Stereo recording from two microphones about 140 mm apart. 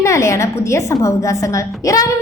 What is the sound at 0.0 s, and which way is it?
A woman's voice, 20° left (ahead or behind).